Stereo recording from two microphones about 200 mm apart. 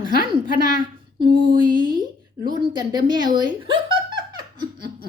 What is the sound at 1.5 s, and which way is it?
A woman's voice, 25° right (ahead or behind).